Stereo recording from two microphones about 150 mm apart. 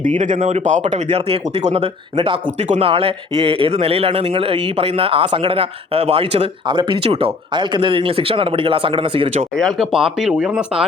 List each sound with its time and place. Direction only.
0.2 s speech: 55° right (ahead or behind); by 9.3 s 35° right (ahead or behind)
9.6 s speech: centre (ahead or behind)